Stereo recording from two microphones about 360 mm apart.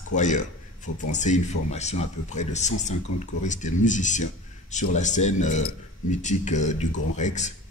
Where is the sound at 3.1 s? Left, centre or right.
Left.